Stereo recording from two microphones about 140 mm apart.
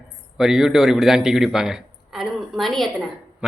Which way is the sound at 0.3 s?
5° right (ahead or behind).